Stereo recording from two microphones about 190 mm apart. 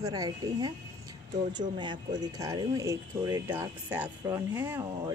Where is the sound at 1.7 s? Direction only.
25° right (ahead or behind).